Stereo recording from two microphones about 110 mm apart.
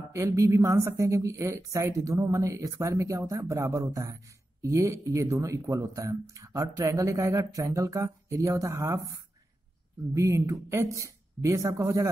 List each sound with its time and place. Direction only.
0.1 s speech: 30° right (ahead or behind)
10.1 s speech: 25° right (ahead or behind)